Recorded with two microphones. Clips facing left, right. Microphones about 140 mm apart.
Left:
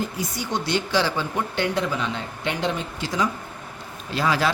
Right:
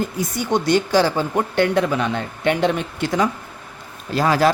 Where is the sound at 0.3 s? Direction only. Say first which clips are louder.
Right 8 dB; 50° right (ahead or behind).